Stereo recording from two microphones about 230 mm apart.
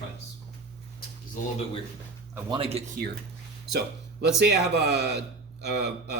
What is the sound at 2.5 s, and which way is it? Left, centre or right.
Speech, right.